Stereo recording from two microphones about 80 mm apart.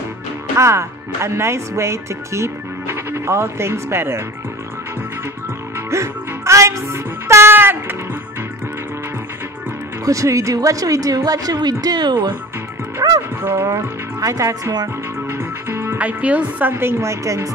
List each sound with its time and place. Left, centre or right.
0.6 s speech: right
5.9 s music: right
10.0 s a woman's voice: right
13.0 s speech: right
13.4 s a woman's voice: right
15.2 s music: right
16.0 s speech: centre
16.7 s speech: right